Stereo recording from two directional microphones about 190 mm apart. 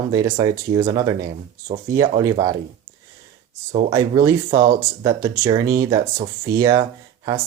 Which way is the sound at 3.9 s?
15° right (ahead or behind).